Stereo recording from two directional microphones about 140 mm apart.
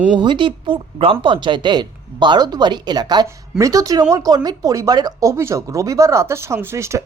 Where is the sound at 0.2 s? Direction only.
35° right (ahead or behind).